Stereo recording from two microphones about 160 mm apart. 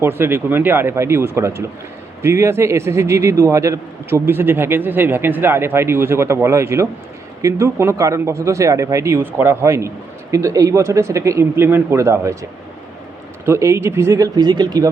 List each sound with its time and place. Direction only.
0.0 s a man's voice: 15° right (ahead or behind)